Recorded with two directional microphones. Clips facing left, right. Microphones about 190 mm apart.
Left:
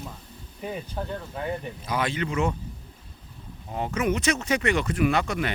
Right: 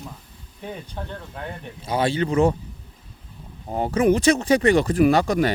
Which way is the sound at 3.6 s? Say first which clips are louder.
Right 7 dB; 35° right (ahead or behind).